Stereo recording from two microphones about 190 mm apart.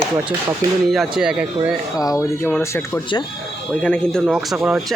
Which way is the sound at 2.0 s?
15° left (ahead or behind).